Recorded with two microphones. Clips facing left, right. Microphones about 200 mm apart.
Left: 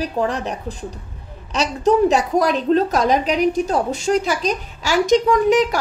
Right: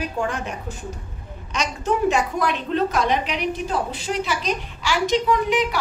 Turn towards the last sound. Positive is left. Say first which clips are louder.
# left 5 dB
turn(degrees=45)  # may be behind; listen again after turning